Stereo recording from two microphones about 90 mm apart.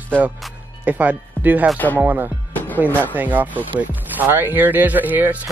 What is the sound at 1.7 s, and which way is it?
Speech, 20° left (ahead or behind).